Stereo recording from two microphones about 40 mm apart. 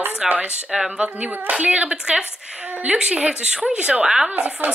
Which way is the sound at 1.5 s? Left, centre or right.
Right.